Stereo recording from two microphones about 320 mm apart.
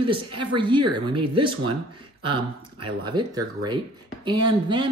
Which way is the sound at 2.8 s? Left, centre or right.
Centre.